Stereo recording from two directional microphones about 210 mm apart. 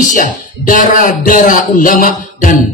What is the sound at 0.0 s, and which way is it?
Speech, 40° left (ahead or behind).